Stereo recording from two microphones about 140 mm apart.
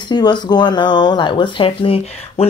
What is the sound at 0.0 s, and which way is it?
Speech, 30° left (ahead or behind).